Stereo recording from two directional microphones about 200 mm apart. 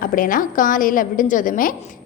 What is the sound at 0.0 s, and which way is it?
A woman's voice, 45° left (ahead or behind).